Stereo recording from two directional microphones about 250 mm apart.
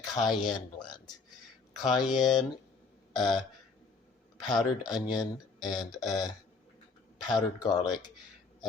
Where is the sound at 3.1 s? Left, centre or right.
Centre.